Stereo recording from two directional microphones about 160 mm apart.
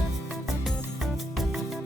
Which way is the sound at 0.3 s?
Centre (ahead or behind).